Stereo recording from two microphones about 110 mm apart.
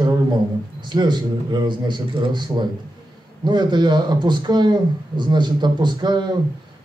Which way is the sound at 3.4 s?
40° right (ahead or behind).